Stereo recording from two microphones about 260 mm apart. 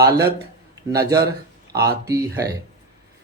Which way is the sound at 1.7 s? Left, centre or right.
Centre.